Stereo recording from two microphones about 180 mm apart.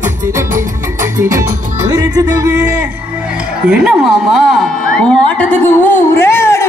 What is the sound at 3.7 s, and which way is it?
Speech, 5° right (ahead or behind).